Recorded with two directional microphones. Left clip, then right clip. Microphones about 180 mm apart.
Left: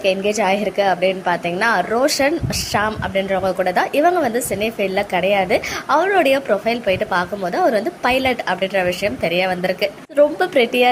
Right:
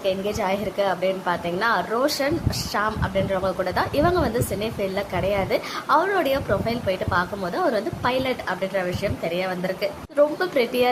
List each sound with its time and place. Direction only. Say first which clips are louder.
0.0 s a woman's voice: left 7 dB; 15° left (ahead or behind)